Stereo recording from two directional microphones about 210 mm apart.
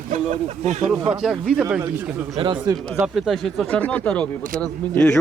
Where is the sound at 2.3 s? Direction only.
25° right (ahead or behind).